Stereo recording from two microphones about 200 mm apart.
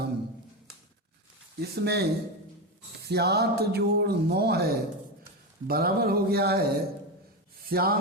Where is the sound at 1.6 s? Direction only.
55° right (ahead or behind).